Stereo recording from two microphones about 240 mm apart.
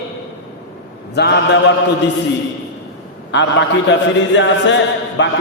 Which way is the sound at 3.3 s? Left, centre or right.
Left.